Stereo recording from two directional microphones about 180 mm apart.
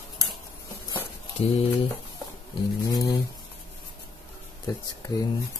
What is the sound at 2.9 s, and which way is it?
Speech, 20° left (ahead or behind).